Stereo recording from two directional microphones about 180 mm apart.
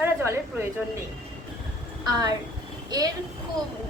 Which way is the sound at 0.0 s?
10° right (ahead or behind).